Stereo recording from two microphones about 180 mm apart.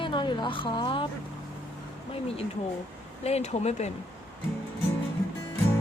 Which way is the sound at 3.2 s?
35° left (ahead or behind).